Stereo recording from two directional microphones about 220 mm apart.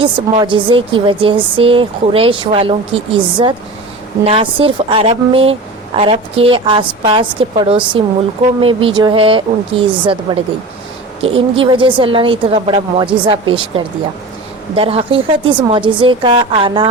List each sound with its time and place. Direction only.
0.0 s a woman's voice: 25° right (ahead or behind)
11.2 s a woman's voice: 25° right (ahead or behind)